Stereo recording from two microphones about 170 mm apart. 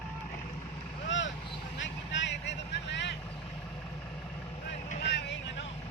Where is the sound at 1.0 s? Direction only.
90° left.